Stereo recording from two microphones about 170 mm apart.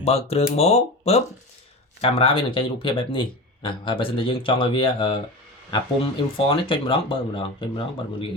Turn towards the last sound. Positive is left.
turn(degrees=30)  # may be behind; listen again after turning